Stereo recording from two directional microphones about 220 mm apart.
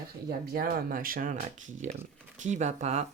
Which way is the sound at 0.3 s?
45° right (ahead or behind).